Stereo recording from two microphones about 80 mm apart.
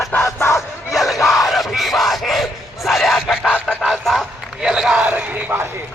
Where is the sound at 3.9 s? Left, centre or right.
Centre.